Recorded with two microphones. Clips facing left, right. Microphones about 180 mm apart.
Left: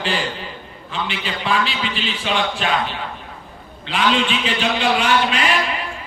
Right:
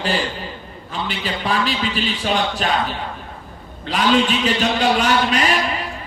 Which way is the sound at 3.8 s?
40° right (ahead or behind).